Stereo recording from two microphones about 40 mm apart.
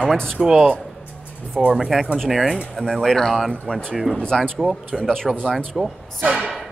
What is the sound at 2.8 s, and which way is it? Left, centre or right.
Speech, centre.